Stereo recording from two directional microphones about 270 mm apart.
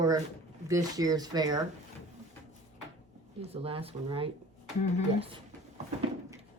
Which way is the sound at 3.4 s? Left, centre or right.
Right.